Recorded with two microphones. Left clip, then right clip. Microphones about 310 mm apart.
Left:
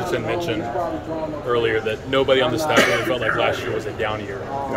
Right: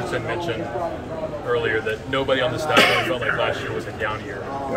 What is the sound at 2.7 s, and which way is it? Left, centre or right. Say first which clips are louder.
Speech: right 2 dB; centre.